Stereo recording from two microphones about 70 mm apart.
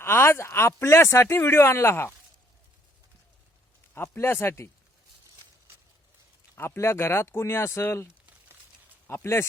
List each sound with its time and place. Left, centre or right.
0.0 s speech: left
3.9 s speech: left
6.6 s speech: left